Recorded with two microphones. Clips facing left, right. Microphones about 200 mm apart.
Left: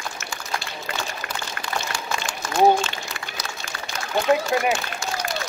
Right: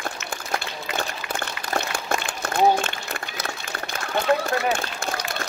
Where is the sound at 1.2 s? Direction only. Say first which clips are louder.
Right 2 dB; 50° left (ahead or behind).